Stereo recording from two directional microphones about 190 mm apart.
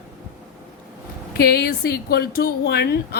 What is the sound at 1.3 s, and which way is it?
A woman's voice, 55° left (ahead or behind).